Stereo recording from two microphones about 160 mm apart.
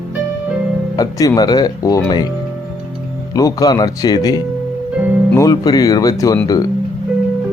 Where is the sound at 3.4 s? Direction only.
25° left (ahead or behind).